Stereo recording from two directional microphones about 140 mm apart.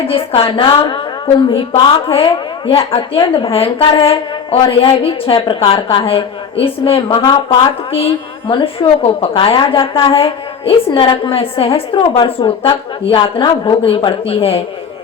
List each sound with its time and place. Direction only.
0.1 s a woman's voice: 45° left (ahead or behind)